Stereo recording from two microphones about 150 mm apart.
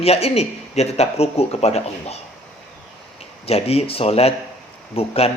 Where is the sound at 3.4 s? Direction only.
40° left (ahead or behind).